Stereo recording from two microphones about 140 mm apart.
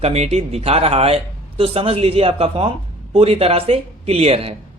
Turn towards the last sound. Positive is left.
turn(degrees=-45)  # may be behind; listen again after turning